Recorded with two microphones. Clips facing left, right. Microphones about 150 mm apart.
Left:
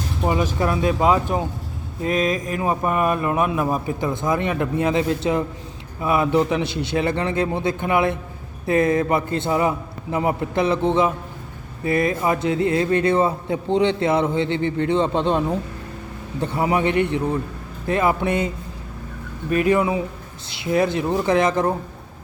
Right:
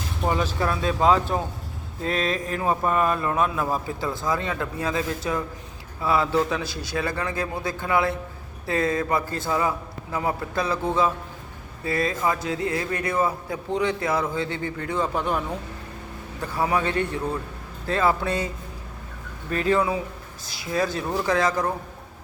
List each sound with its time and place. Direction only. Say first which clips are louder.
0.2 s speech: left 3 dB; 10° left (ahead or behind)